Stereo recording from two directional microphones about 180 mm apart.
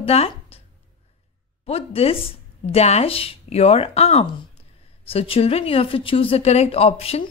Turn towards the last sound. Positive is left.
turn(degrees=35)  # may be behind; listen again after turning